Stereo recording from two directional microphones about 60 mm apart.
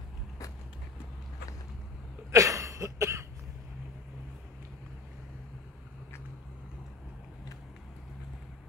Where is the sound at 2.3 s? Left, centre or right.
Right.